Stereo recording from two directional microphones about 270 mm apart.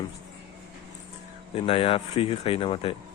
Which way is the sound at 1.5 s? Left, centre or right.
Left.